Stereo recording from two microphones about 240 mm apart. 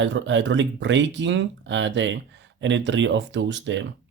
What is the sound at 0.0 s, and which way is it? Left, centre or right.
Speech, right.